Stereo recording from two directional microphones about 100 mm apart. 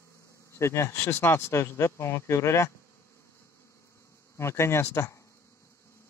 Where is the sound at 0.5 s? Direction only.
25° left (ahead or behind).